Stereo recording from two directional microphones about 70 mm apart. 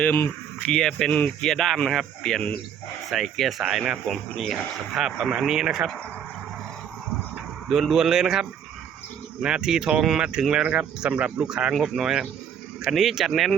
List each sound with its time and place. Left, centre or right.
0.6 s speech: centre
1.1 s speech: centre
1.5 s speech: centre
7.7 s speech: centre